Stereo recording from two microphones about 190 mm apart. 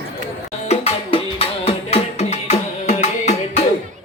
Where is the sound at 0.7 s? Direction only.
30° left (ahead or behind).